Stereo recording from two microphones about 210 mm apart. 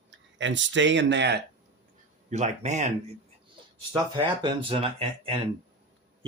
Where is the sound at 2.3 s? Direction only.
35° right (ahead or behind).